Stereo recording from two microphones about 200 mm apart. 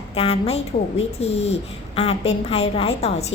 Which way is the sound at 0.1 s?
30° left (ahead or behind).